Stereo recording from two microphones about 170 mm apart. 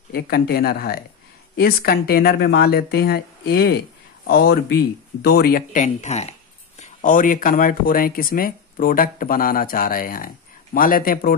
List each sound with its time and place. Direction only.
0.1 s speech: 65° left (ahead or behind)